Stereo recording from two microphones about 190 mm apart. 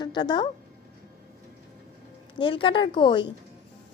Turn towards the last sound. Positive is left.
turn(degrees=25)  # may be behind; listen again after turning